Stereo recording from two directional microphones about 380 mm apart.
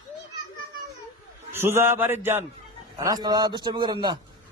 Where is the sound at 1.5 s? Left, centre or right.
Centre.